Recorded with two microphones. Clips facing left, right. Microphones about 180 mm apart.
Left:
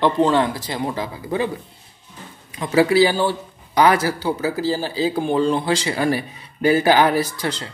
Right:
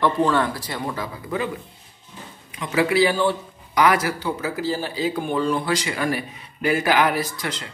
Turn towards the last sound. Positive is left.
turn(degrees=30)  # may be behind; listen again after turning